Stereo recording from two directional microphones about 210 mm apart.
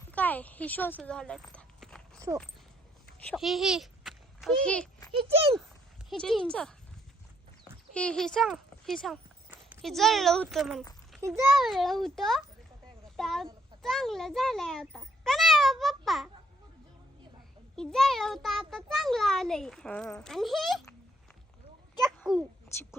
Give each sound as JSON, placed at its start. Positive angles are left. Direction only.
{"t": 0.1, "sound": "speech", "side_deg": 5}
{"t": 2.1, "sound": "horse", "side_deg": -15}
{"t": 3.2, "sound": "a child's voice", "side_deg": 0}
{"t": 5.1, "sound": "speech", "side_deg": -25}
{"t": 6.1, "sound": "a child's voice", "side_deg": 0}
{"t": 7.9, "sound": "a child's voice", "side_deg": 5}
{"t": 13.1, "sound": "a sound", "side_deg": 0}
{"t": 17.7, "sound": "a child's voice", "side_deg": 0}
{"t": 22.0, "sound": "a sound", "side_deg": 0}